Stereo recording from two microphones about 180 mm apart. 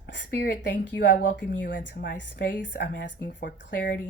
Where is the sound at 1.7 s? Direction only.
75° left (ahead or behind).